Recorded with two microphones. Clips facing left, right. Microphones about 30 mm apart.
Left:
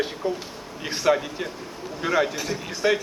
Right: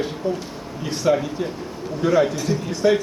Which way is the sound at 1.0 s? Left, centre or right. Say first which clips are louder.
Right 2 dB; left.